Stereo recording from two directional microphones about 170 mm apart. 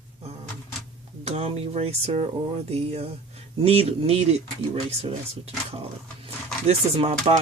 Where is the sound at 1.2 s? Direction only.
35° right (ahead or behind).